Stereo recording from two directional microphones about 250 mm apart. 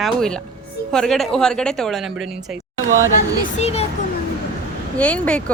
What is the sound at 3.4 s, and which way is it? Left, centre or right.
Speech, left.